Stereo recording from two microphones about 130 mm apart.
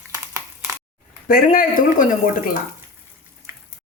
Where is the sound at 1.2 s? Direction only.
90° left.